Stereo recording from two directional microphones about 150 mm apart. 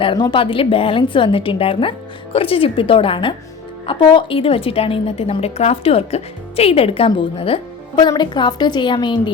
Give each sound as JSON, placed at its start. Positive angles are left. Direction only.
{"t": 0.0, "sound": "a woman's voice", "side_deg": 35}